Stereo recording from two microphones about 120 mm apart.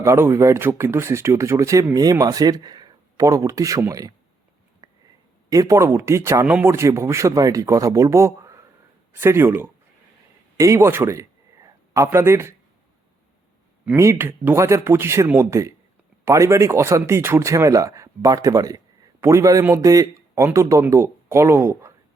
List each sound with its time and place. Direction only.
0.0 s speech: 20° right (ahead or behind)
4.8 s a sound: 30° right (ahead or behind)
5.5 s a man's voice: 30° right (ahead or behind)
13.9 s speech: 20° right (ahead or behind)